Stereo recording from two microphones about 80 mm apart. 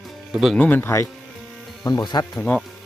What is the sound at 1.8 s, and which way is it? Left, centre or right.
Speech, left.